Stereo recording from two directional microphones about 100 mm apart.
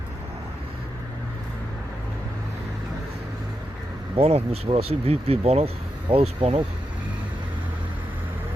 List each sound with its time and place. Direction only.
4.1 s speech: 85° right